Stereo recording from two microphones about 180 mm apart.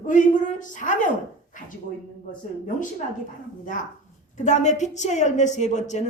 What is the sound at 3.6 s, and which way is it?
A man's voice, 45° left (ahead or behind).